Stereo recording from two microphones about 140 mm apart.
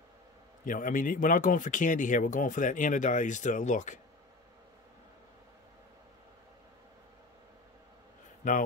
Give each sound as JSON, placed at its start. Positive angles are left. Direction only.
{"t": 0.7, "sound": "speech", "side_deg": 75}
{"t": 8.4, "sound": "speech", "side_deg": 65}